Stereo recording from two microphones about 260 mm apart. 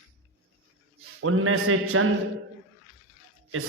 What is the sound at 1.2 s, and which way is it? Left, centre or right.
Speech, right.